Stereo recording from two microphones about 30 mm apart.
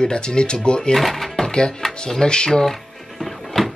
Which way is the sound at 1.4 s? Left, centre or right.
Left.